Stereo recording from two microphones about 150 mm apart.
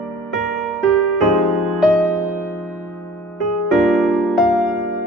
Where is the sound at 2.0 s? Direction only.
15° left (ahead or behind).